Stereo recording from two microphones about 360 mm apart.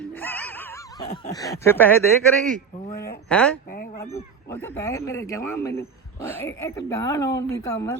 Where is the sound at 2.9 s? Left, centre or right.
Left.